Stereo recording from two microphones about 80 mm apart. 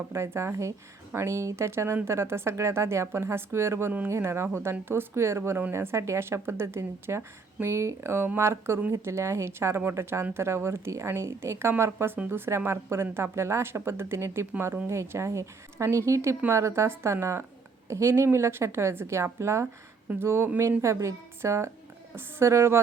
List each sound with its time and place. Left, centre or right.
0.1 s speech: right